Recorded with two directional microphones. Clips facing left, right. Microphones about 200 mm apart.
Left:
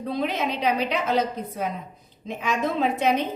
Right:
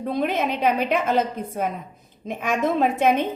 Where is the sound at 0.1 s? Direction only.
50° right (ahead or behind).